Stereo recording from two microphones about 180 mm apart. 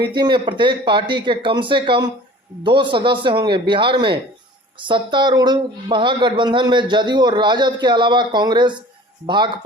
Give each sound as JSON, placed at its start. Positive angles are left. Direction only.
{"t": 0.0, "sound": "speech", "side_deg": -25}